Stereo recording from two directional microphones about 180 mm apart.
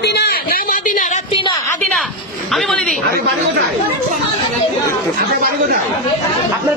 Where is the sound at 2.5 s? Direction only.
5° left (ahead or behind).